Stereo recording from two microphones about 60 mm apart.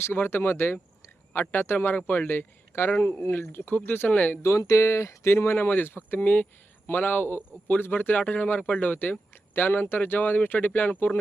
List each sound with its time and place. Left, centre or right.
0.0 s speech: left
4.4 s speech: left